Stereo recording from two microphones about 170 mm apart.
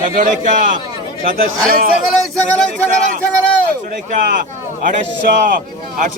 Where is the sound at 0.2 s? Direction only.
55° right (ahead or behind).